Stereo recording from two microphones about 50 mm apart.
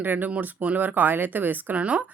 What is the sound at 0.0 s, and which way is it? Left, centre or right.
Speech, right.